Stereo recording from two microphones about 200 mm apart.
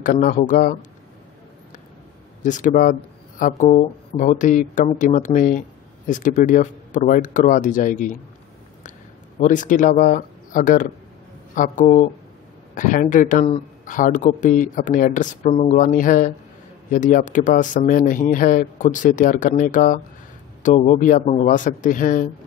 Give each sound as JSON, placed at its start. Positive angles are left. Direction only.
{"t": 0.0, "sound": "speech", "side_deg": 40}
{"t": 2.4, "sound": "speech", "side_deg": 40}
{"t": 9.4, "sound": "speech", "side_deg": 40}